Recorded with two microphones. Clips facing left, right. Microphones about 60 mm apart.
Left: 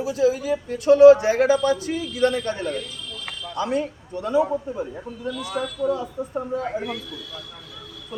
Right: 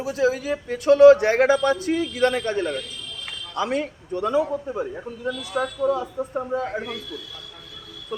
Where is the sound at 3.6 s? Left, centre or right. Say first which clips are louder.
Even; right.